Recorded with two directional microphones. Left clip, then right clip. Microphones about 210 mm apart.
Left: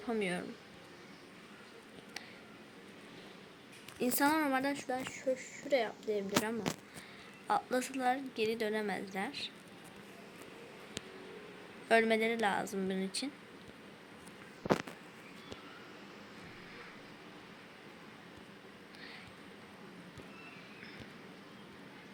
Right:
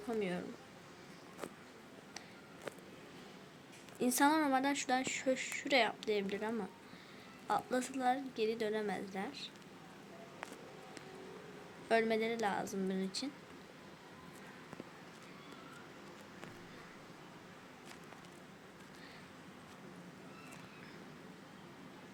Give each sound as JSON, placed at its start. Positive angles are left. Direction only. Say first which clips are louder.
{"t": 0.1, "sound": "a woman's voice", "louder": "left 3 dB", "side_deg": 5}
{"t": 4.0, "sound": "a woman's voice", "louder": "even", "side_deg": -5}
{"t": 5.1, "sound": "speech", "louder": "right 1 dB", "side_deg": -20}
{"t": 7.4, "sound": "a woman's voice", "louder": "left 3 dB", "side_deg": 0}
{"t": 11.9, "sound": "a woman's voice", "louder": "left 4 dB", "side_deg": 0}